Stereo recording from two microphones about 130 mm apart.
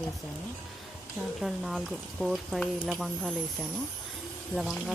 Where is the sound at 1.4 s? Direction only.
Centre (ahead or behind).